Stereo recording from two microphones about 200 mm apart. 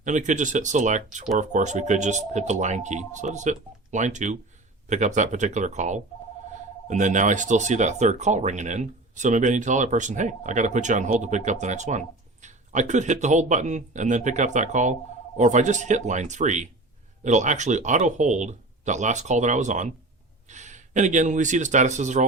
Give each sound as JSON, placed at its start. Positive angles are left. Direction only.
{"t": 0.0, "sound": "speech", "side_deg": -40}